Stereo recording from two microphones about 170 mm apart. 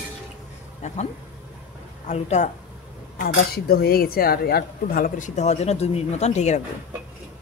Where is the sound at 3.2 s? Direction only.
65° left (ahead or behind); by 6.6 s 40° left (ahead or behind).